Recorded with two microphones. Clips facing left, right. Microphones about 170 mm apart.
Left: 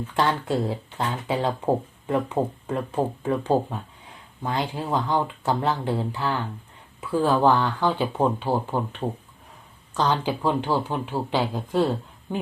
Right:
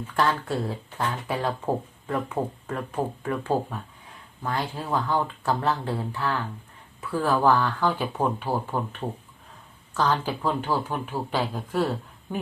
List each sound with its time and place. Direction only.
0.2 s speech: 20° left (ahead or behind)